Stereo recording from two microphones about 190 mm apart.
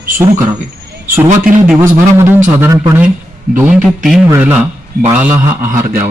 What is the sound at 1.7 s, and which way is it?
A man's voice, 10° right (ahead or behind).